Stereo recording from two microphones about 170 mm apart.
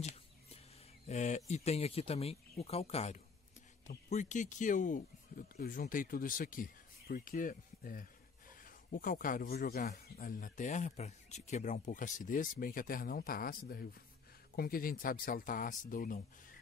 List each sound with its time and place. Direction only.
1.0 s speech: 45° left (ahead or behind)